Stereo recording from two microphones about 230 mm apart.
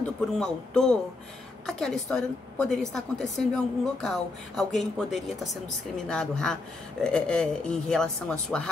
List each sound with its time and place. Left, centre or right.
0.0 s a woman's voice: centre